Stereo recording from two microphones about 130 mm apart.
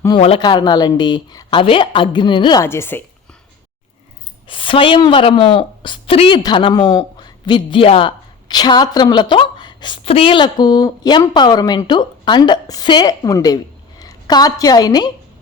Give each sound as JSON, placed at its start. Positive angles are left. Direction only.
{"t": 0.3, "sound": "a woman's voice", "side_deg": 35}
{"t": 2.6, "sound": "a woman's voice", "side_deg": 20}
{"t": 4.4, "sound": "a woman's voice", "side_deg": 40}
{"t": 10.0, "sound": "a woman's voice", "side_deg": 50}